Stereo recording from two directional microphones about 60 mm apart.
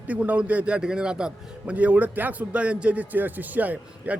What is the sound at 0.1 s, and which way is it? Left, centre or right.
A man's voice, right.